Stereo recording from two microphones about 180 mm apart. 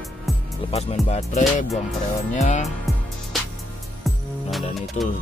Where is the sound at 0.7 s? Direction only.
35° left (ahead or behind).